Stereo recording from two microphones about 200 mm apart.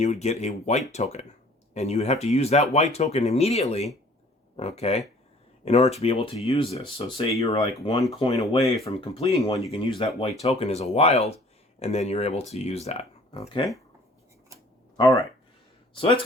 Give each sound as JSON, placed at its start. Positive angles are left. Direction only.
{"t": 0.0, "sound": "speech", "side_deg": 35}
{"t": 14.9, "sound": "speech", "side_deg": 15}
{"t": 16.0, "sound": "speech", "side_deg": 25}